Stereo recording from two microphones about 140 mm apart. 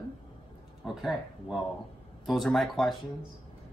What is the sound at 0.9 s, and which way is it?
Speech, centre (ahead or behind).